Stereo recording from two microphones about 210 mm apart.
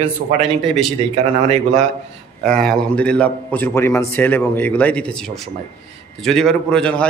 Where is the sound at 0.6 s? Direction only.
Centre (ahead or behind).